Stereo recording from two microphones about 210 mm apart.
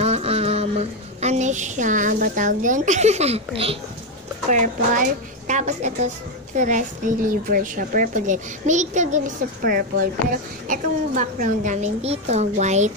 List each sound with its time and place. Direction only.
0.0 s a woman's voice: 30° right (ahead or behind)